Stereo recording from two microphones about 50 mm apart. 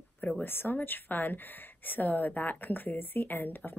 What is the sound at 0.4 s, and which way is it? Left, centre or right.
A woman's voice, left.